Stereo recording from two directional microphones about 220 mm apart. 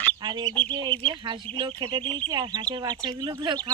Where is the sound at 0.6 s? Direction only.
25° right (ahead or behind).